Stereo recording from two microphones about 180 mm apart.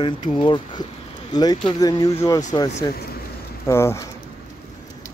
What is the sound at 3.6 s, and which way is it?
Speech, 15° left (ahead or behind).